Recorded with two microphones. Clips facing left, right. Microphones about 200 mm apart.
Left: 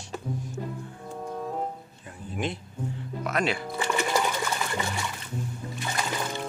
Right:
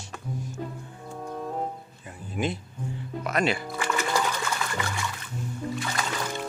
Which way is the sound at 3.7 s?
20° left (ahead or behind).